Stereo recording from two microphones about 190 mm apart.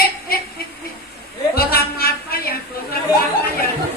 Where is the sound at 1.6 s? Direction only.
55° left (ahead or behind).